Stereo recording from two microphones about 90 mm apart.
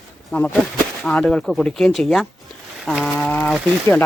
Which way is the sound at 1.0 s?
5° left (ahead or behind).